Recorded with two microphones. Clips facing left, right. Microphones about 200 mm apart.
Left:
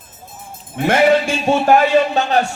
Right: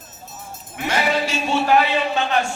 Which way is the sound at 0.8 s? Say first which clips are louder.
Left 8 dB; 55° left (ahead or behind).